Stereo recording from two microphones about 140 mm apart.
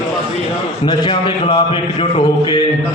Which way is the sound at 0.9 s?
30° left (ahead or behind).